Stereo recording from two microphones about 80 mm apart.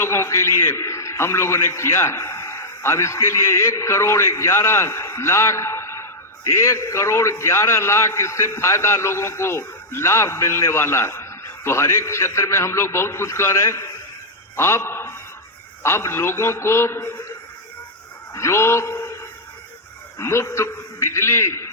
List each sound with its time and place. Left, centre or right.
0.0 s a man's voice: left
18.3 s a man's voice: left
20.1 s a man's voice: left